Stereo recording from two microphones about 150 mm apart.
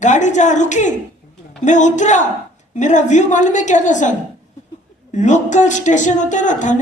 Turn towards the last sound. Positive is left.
turn(degrees=55)  # may be behind; listen again after turning